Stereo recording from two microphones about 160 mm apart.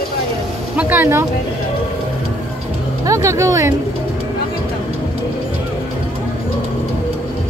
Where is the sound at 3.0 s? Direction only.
20° right (ahead or behind).